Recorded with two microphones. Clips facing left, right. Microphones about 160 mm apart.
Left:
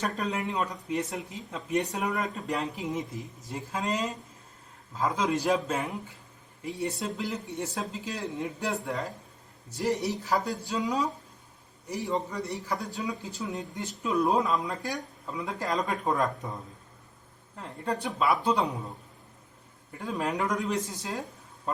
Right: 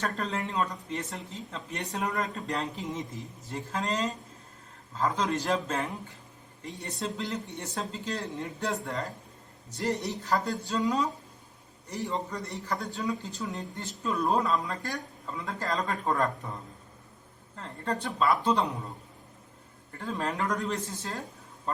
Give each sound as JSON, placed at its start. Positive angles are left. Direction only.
{"t": 0.0, "sound": "speech", "side_deg": 15}
{"t": 2.0, "sound": "speech", "side_deg": 5}
{"t": 13.5, "sound": "speech", "side_deg": 15}
{"t": 17.6, "sound": "speech", "side_deg": 10}
{"t": 19.9, "sound": "speech", "side_deg": 10}